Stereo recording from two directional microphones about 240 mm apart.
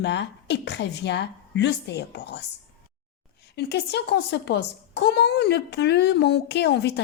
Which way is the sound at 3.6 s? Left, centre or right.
Left.